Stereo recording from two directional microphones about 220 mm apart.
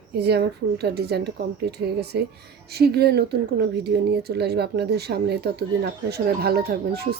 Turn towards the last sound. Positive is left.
turn(degrees=-45)  # may be behind; listen again after turning